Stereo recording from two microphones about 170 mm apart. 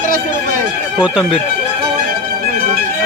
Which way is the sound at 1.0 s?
5° right (ahead or behind).